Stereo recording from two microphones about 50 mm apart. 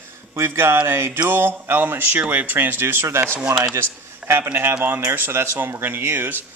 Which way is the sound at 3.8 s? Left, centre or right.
Right.